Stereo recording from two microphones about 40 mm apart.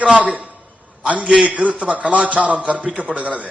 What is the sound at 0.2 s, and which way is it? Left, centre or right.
A man's voice, right.